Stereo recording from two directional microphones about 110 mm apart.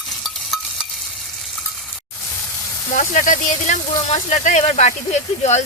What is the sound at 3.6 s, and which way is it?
Speech, 90° left.